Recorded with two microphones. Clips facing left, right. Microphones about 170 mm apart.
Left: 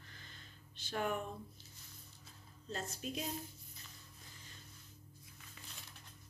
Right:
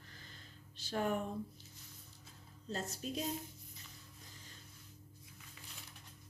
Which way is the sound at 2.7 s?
40° right (ahead or behind).